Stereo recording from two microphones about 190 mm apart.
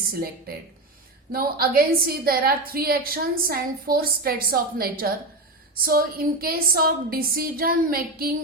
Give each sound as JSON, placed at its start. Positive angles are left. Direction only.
{"t": 0.1, "sound": "a woman's voice", "side_deg": -50}